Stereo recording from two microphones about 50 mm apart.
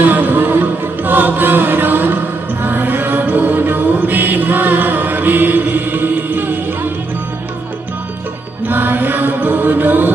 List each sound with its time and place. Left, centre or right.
0.0 s music: right
8.6 s mantra: right